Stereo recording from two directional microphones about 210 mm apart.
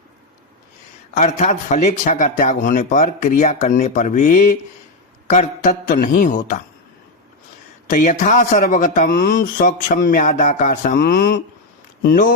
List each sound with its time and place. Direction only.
1.1 s speech: 35° left (ahead or behind)
7.9 s speech: 40° left (ahead or behind)